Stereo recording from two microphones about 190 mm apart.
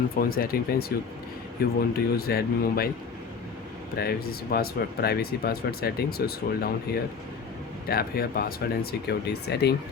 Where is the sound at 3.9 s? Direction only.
55° left (ahead or behind).